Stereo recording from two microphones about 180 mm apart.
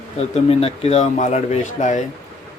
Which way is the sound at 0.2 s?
35° left (ahead or behind).